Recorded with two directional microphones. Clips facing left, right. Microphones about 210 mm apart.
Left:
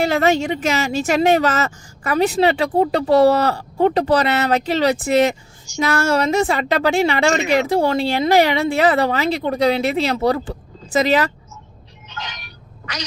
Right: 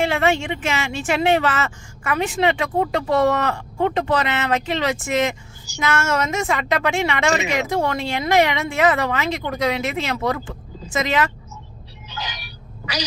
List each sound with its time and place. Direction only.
0.0 s a woman's voice: 40° left (ahead or behind)